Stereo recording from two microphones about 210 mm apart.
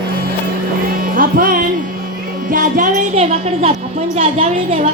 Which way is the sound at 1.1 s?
40° right (ahead or behind).